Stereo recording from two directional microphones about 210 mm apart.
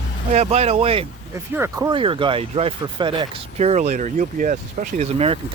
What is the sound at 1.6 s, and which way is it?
Speech, 15° right (ahead or behind).